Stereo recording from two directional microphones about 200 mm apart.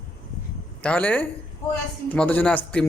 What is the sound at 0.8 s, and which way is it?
Speech, 5° left (ahead or behind).